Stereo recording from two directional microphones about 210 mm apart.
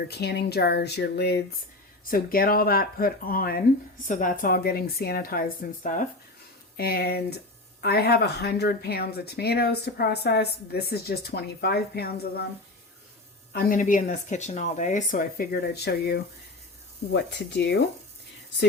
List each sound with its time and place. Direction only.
0.1 s speech: 50° left (ahead or behind)
13.5 s speech: 45° left (ahead or behind)
17.1 s a sound: 55° left (ahead or behind)